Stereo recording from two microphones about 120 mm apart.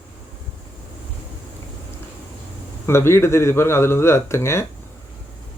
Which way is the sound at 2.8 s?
20° left (ahead or behind).